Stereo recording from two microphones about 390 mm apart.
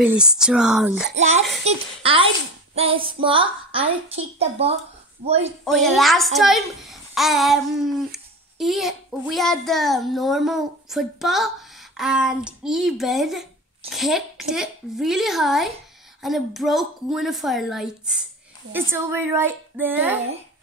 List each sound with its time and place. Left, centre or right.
0.0 s a child's voice: centre
1.1 s a woman's voice: centre
5.7 s a child's voice: centre